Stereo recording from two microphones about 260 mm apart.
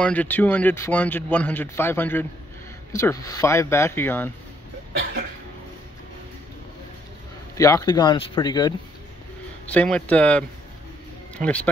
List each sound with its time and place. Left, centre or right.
0.0 s speech: centre
7.5 s speech: centre
9.7 s speech: centre